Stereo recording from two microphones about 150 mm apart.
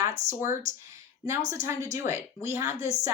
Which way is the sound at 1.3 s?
20° right (ahead or behind).